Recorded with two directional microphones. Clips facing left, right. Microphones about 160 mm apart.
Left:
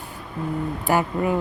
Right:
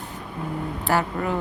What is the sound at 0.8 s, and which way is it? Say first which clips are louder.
Speech: left 2 dB; 15° left (ahead or behind).